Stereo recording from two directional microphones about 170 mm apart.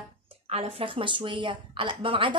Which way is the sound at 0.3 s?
35° right (ahead or behind).